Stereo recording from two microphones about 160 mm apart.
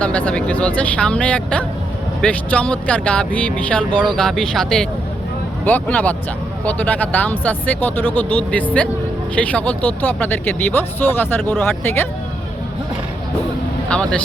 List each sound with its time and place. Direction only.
0.0 s speech: 10° left (ahead or behind)
13.9 s speech: 5° left (ahead or behind)